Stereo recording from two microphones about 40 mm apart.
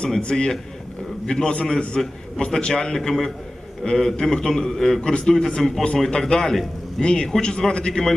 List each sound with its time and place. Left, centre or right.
0.2 s a man's voice: left
2.0 s a man's voice: centre